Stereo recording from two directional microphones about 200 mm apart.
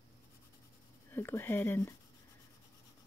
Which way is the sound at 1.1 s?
10° left (ahead or behind).